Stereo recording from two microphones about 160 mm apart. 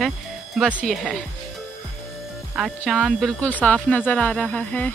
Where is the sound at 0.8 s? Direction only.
Centre (ahead or behind).